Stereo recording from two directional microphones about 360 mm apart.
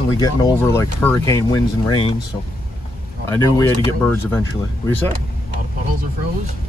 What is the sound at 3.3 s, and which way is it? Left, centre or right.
Speech, centre.